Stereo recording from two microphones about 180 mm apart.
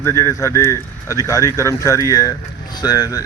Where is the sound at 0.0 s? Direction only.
15° left (ahead or behind).